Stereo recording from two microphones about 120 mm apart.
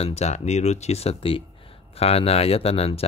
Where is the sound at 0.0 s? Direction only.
65° left (ahead or behind).